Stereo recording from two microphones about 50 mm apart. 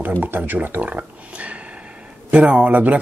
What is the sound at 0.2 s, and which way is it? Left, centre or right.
Speech, right.